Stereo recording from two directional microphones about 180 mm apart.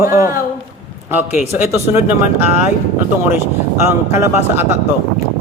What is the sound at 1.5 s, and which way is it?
Speech, 10° right (ahead or behind).